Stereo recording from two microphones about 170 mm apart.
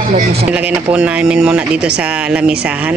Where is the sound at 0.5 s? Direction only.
5° right (ahead or behind).